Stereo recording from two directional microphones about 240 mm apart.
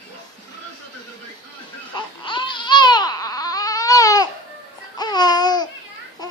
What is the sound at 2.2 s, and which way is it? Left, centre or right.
Baby cry, centre.